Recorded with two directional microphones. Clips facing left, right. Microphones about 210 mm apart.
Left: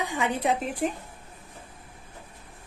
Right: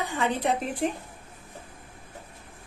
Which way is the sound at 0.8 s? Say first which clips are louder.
Right 1 dB; centre (ahead or behind).